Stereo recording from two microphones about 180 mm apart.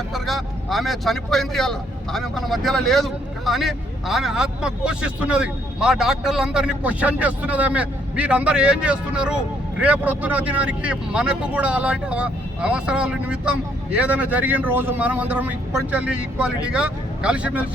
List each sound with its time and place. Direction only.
0.1 s speech: centre (ahead or behind)